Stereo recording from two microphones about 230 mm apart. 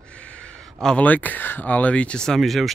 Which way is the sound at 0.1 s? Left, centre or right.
Centre.